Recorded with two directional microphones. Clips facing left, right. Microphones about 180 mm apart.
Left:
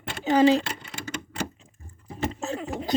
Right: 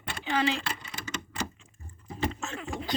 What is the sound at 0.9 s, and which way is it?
Typewriter, 60° left (ahead or behind).